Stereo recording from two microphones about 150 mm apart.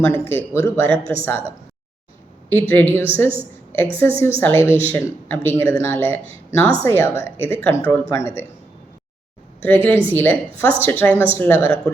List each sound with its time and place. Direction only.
0.0 s speech: 15° left (ahead or behind)
9.6 s a woman's voice: 15° left (ahead or behind)